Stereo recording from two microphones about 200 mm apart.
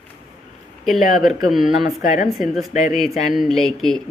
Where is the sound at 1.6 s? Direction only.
45° left (ahead or behind).